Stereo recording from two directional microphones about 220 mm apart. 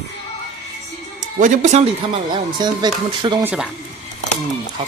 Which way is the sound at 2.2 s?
20° right (ahead or behind).